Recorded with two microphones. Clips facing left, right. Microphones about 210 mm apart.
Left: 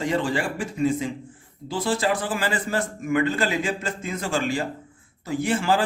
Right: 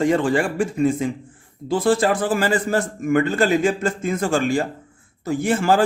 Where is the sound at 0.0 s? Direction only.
50° right (ahead or behind).